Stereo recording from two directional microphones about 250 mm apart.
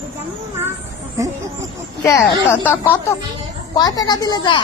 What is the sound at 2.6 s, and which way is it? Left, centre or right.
A woman's voice, centre.